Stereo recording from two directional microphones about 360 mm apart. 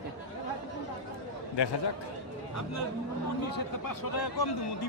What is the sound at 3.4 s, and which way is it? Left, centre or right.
Speech, left.